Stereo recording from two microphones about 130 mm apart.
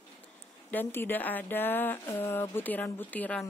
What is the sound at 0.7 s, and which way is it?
Speech, 15° left (ahead or behind).